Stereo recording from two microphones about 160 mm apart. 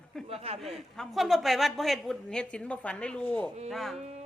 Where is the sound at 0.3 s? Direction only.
40° right (ahead or behind).